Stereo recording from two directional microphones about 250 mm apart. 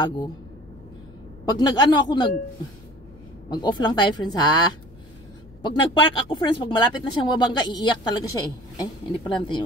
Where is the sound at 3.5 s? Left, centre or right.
Centre.